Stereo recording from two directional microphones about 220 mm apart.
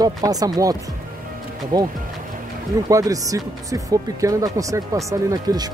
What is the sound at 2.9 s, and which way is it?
Speech, 15° right (ahead or behind).